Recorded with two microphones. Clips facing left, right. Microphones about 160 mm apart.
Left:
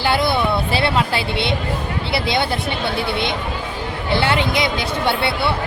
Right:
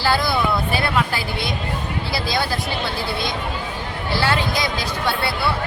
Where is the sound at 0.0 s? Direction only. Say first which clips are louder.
Left 2 dB; 25° left (ahead or behind).